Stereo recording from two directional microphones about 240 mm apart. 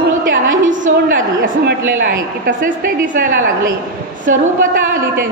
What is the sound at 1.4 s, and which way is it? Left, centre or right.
A woman's voice, right.